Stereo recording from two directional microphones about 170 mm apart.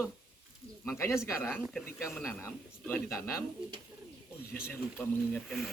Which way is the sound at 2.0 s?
Centre (ahead or behind).